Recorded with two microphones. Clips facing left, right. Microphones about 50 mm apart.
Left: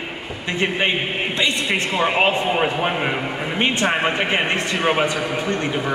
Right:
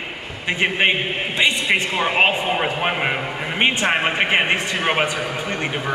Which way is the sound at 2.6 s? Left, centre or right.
Centre.